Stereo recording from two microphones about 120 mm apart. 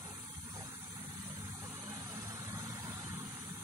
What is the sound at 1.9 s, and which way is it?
Vehicle, 30° right (ahead or behind).